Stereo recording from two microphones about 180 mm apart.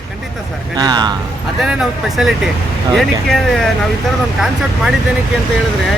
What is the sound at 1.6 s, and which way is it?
Speech, 5° right (ahead or behind).